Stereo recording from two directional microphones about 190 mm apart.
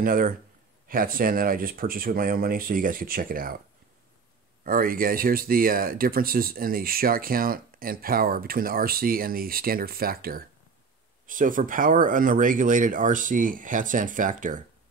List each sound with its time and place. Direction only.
0.0 s speech: 45° right (ahead or behind)
4.6 s speech: 50° right (ahead or behind)